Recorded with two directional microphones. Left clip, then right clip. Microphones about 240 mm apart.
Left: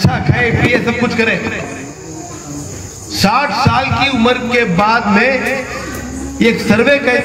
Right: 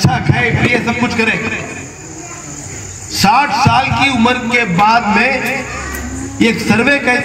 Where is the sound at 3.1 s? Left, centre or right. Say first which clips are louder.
Right 2 dB; right.